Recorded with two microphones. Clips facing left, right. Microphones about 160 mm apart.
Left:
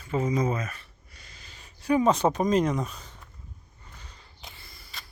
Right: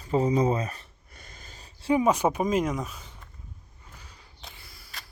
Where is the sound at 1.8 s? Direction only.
25° right (ahead or behind).